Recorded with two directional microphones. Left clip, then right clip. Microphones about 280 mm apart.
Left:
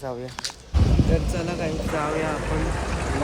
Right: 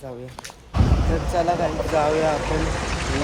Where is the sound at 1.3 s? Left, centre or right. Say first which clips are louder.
Right 7 dB; centre.